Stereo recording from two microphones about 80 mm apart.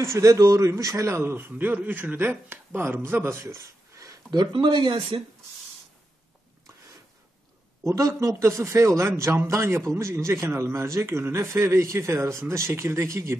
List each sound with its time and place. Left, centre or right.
0.0 s a man's voice: right
4.3 s speech: right
7.8 s a man's voice: right